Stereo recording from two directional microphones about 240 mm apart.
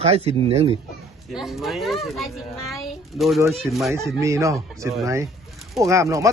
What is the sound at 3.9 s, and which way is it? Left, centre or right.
Speech, centre.